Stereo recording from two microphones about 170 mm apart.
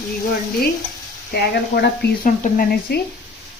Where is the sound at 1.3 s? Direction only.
65° left (ahead or behind).